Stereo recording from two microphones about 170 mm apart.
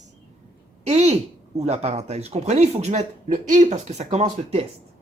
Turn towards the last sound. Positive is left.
turn(degrees=-40)  # may be behind; listen again after turning